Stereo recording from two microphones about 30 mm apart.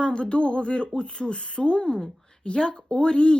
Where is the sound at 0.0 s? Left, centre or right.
Left.